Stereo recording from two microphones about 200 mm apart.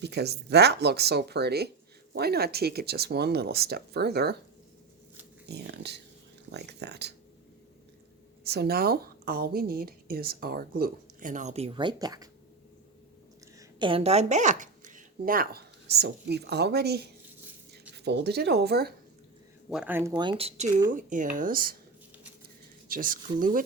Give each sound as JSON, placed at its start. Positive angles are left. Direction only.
{"t": 0.0, "sound": "speech", "side_deg": -55}
{"t": 5.5, "sound": "speech", "side_deg": -55}
{"t": 8.4, "sound": "speech", "side_deg": -50}
{"t": 13.6, "sound": "speech", "side_deg": -25}
{"t": 19.7, "sound": "speech", "side_deg": -10}
{"t": 20.9, "sound": "speech", "side_deg": -40}
{"t": 22.9, "sound": "speech", "side_deg": -45}